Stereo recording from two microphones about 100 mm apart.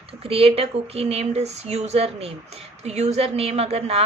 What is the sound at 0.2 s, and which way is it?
A woman's voice, 75° right (ahead or behind).